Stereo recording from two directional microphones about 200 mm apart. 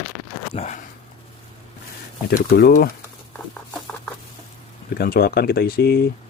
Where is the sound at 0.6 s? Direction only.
35° left (ahead or behind).